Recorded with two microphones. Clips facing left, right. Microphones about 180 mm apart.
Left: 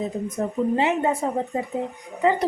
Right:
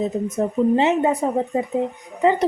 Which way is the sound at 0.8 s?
20° right (ahead or behind).